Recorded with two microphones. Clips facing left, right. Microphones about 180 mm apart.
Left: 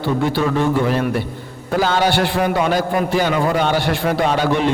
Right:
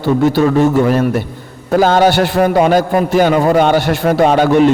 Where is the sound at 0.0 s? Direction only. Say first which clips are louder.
Right 7 dB; 45° right (ahead or behind).